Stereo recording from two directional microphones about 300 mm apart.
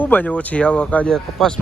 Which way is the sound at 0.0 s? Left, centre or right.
Centre.